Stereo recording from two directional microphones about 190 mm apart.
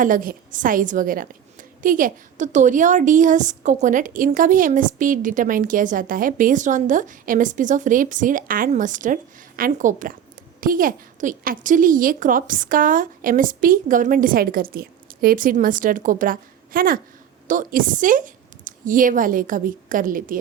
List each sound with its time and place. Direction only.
0.0 s a woman's voice: 45° right (ahead or behind)